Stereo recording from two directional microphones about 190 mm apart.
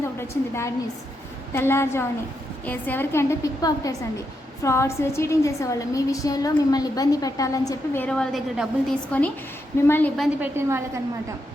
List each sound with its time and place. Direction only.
0.2 s a woman's voice: 15° left (ahead or behind)
8.0 s a woman's voice: 5° left (ahead or behind)
10.2 s a woman's voice: 10° right (ahead or behind)